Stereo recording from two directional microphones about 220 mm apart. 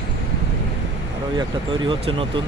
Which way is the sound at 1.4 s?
20° right (ahead or behind).